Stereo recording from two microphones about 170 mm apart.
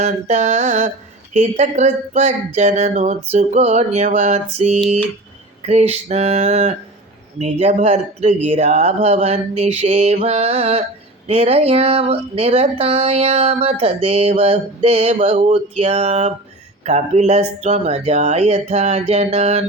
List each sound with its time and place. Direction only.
0.0 s speech: 45° right (ahead or behind)